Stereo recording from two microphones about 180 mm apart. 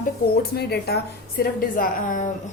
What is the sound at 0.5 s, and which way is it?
Speech, 65° left (ahead or behind).